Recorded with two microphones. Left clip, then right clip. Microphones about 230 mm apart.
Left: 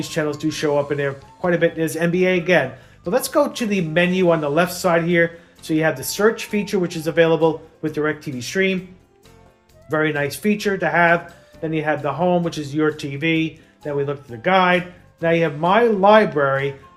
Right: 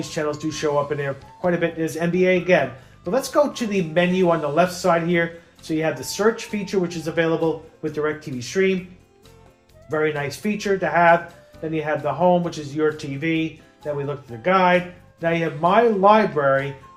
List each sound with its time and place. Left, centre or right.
0.0 s speech: left
9.9 s speech: left